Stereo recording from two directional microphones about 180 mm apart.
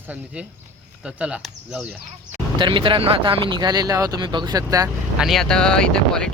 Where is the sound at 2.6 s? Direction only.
25° right (ahead or behind).